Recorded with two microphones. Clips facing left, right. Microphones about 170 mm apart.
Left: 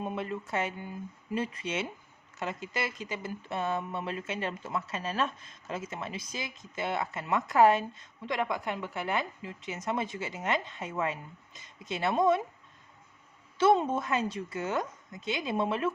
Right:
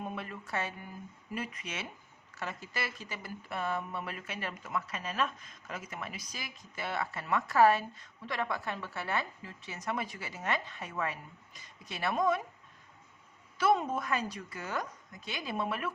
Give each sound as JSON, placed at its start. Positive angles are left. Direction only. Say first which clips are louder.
{"t": 0.0, "sound": "speech", "louder": "left 6 dB", "side_deg": 25}
{"t": 13.6, "sound": "speech", "louder": "left 4 dB", "side_deg": 25}